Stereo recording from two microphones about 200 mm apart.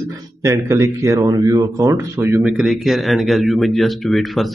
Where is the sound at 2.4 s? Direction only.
Centre (ahead or behind).